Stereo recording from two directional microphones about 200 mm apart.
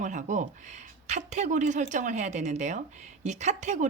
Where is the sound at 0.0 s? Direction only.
40° right (ahead or behind).